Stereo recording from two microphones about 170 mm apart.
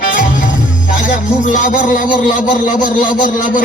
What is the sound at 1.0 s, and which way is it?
Music, 50° left (ahead or behind).